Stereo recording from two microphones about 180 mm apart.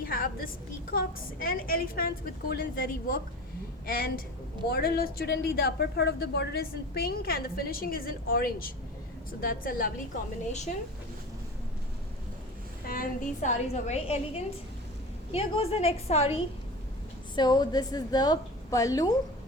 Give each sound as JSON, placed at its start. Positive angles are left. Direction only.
{"t": 0.0, "sound": "a sound", "side_deg": 55}
{"t": 0.9, "sound": "a woman's voice", "side_deg": 50}
{"t": 12.8, "sound": "a woman's voice", "side_deg": 50}
{"t": 17.3, "sound": "a woman's voice", "side_deg": 25}